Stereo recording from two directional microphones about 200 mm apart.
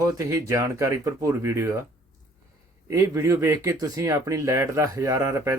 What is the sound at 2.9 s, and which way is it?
Speech, 15° right (ahead or behind).